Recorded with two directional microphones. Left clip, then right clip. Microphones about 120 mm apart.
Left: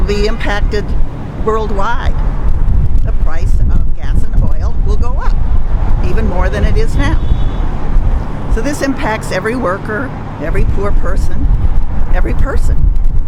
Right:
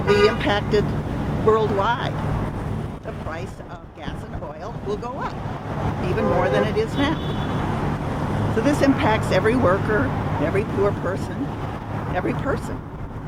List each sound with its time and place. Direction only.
0.1 s speech: 25° right (ahead or behind)
6.0 s speech: 20° right (ahead or behind)
8.5 s speech: 25° right (ahead or behind)
12.1 s speech: 20° right (ahead or behind)